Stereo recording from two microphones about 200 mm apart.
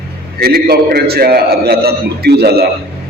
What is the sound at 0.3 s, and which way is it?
A man's voice, 50° right (ahead or behind).